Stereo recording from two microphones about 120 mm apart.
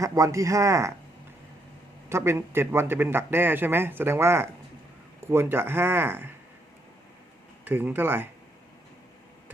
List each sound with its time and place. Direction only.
0.0 s a man's voice: 25° right (ahead or behind)
2.0 s a man's voice: 20° right (ahead or behind)
7.6 s speech: 15° right (ahead or behind)